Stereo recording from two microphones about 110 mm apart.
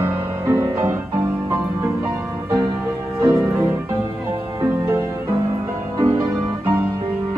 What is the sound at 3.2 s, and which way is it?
Music, 25° right (ahead or behind).